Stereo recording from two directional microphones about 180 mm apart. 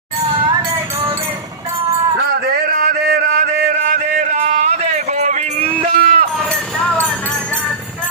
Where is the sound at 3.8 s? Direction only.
45° right (ahead or behind).